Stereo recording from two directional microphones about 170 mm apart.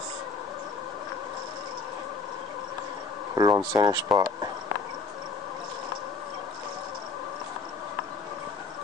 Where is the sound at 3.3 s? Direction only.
25° right (ahead or behind).